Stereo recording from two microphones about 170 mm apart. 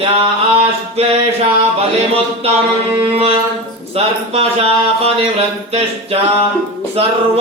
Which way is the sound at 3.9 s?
35° right (ahead or behind).